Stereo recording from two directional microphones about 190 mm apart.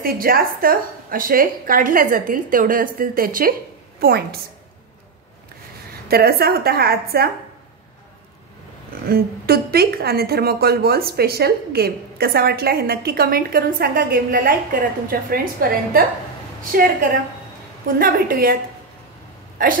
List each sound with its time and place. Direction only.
0.0 s a woman's voice: 50° right (ahead or behind)
6.0 s a woman's voice: 55° right (ahead or behind)
9.1 s a woman's voice: 55° right (ahead or behind)